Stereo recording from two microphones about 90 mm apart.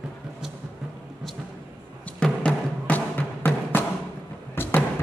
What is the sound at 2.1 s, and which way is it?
Music, 10° left (ahead or behind).